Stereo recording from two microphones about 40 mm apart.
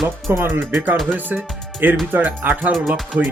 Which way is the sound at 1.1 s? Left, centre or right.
Right.